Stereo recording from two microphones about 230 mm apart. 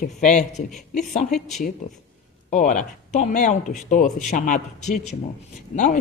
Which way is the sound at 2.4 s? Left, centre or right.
Left.